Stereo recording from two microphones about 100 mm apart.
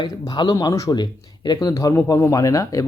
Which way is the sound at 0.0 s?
45° left (ahead or behind).